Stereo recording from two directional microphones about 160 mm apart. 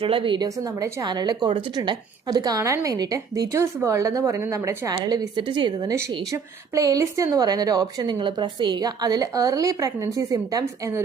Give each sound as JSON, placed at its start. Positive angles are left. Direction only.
{"t": 0.0, "sound": "a woman's voice", "side_deg": -35}
{"t": 5.9, "sound": "a woman's voice", "side_deg": -20}